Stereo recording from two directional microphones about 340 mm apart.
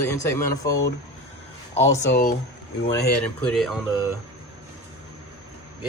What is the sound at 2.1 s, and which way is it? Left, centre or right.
Speech, left.